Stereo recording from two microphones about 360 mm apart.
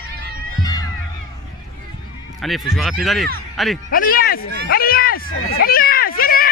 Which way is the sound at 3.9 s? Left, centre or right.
Left.